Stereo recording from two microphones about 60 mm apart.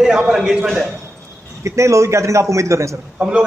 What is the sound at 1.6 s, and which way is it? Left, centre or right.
A man's voice, right.